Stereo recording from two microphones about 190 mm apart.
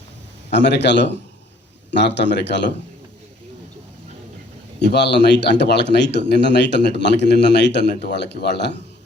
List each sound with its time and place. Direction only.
0.5 s a man's voice: 65° left (ahead or behind)
4.8 s a man's voice: 65° left (ahead or behind)